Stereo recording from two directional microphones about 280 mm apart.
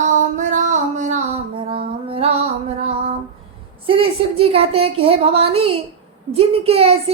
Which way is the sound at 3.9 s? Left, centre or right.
Centre.